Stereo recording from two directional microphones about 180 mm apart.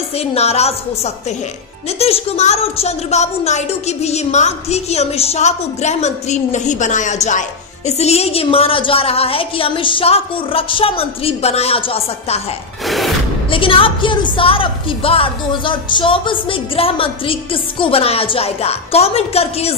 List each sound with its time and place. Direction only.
0.2 s a woman's voice: 35° left (ahead or behind)
12.8 s a sound: centre (ahead or behind)
13.5 s a woman's voice: 30° left (ahead or behind)